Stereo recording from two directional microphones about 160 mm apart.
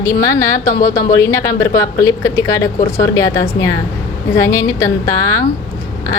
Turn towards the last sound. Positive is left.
turn(degrees=20)  # may be behind; listen again after turning